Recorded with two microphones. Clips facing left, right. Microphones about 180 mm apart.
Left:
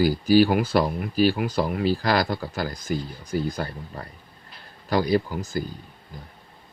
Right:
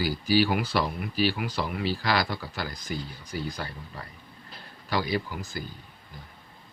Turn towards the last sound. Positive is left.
turn(degrees=45)  # may be behind; listen again after turning